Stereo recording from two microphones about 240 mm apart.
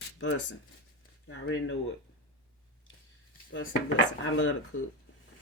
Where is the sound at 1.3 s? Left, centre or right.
Left.